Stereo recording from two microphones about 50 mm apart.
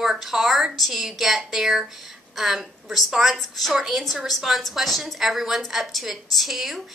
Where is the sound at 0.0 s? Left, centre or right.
Centre.